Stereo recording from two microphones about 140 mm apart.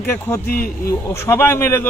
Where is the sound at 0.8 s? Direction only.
20° left (ahead or behind).